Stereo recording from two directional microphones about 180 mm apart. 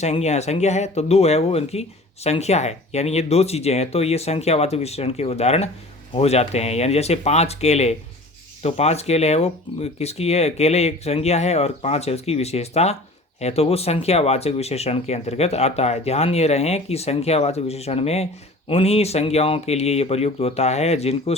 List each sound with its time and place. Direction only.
0.0 s speech: 40° left (ahead or behind)